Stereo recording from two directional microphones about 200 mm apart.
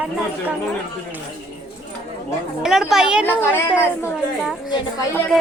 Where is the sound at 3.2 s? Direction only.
10° left (ahead or behind).